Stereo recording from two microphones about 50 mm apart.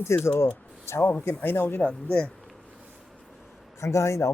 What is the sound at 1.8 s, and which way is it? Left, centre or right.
Speech, centre.